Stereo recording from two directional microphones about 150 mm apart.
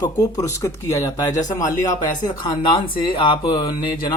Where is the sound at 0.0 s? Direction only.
25° left (ahead or behind).